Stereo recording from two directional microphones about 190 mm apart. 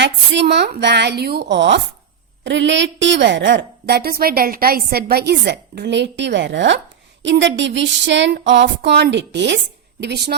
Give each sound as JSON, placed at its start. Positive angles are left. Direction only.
{"t": 0.0, "sound": "a woman's voice", "side_deg": -65}
{"t": 7.2, "sound": "a sound", "side_deg": -70}
{"t": 10.0, "sound": "a woman's voice", "side_deg": -60}